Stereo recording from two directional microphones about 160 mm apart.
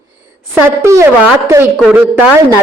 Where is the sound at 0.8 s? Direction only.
20° right (ahead or behind).